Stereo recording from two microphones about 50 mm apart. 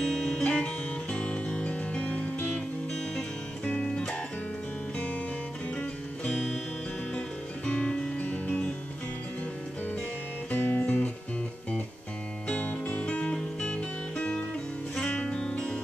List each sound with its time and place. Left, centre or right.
0.0 s guitar: centre
0.4 s music: left
2.5 s music: centre
3.6 s music: left
6.3 s music: centre
7.2 s music: centre
10.5 s music: left
12.6 s music: left